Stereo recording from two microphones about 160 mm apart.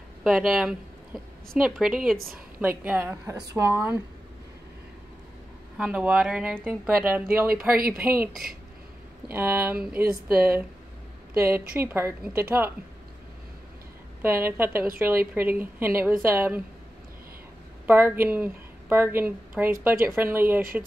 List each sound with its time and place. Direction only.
0.2 s a woman's voice: centre (ahead or behind)
5.8 s a woman's voice: 5° right (ahead or behind)
7.4 s speech: 65° right (ahead or behind)
9.3 s a woman's voice: 15° right (ahead or behind)
14.2 s a woman's voice: 15° right (ahead or behind)
17.8 s a woman's voice: 15° right (ahead or behind)